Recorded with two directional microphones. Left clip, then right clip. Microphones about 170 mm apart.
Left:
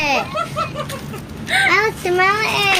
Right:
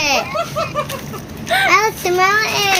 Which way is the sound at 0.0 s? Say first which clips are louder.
Right 1 dB; 10° left (ahead or behind).